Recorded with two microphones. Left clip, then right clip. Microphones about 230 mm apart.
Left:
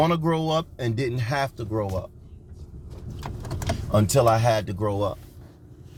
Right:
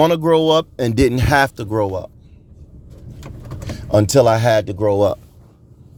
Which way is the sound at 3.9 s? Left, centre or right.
Right.